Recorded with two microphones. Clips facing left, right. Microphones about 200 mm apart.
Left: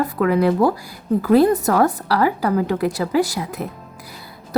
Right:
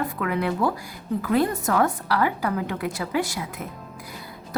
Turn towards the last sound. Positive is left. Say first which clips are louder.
# even
turn(degrees=35)  # may be behind; listen again after turning